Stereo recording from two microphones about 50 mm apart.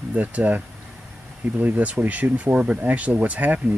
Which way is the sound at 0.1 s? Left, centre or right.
Right.